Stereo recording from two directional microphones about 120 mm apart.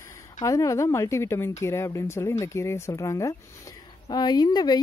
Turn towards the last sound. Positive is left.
turn(degrees=35)  # may be behind; listen again after turning